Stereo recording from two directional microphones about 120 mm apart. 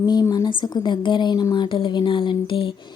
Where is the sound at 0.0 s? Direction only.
35° left (ahead or behind).